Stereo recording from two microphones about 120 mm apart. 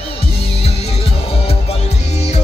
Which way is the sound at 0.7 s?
60° left (ahead or behind).